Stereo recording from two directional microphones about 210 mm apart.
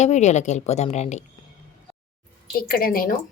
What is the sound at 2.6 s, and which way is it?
Speech, 45° left (ahead or behind).